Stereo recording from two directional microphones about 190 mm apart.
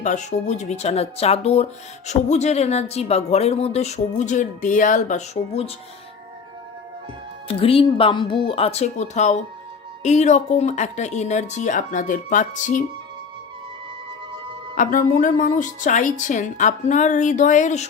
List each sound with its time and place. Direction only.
0.0 s speech: 40° left (ahead or behind)
7.4 s speech: 30° left (ahead or behind)
14.8 s speech: 45° left (ahead or behind)